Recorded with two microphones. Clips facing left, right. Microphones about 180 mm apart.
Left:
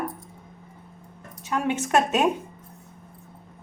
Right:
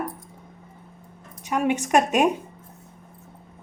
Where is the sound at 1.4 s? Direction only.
15° right (ahead or behind).